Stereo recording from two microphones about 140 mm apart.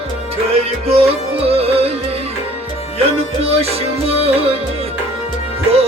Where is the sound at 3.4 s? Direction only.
45° right (ahead or behind).